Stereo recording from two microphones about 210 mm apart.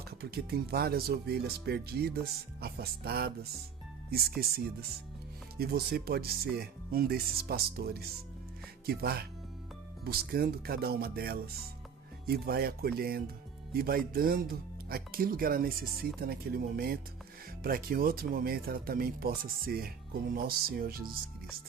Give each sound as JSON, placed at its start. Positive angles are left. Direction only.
{"t": 0.2, "sound": "speech", "side_deg": -50}